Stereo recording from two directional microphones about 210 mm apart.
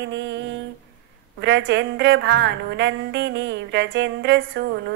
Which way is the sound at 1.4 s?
55° right (ahead or behind).